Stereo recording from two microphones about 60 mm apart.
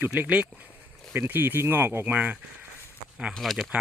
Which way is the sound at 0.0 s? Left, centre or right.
Right.